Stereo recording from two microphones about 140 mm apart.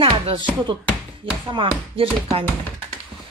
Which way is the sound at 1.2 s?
35° right (ahead or behind).